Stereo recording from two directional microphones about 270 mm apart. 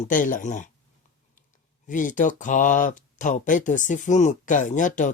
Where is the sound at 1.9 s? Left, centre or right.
Left.